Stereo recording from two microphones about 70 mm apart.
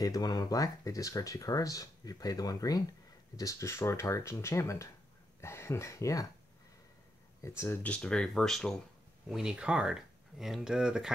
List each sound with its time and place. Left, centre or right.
0.0 s speech: left
7.4 s speech: left
7.8 s speech: centre
9.3 s speech: centre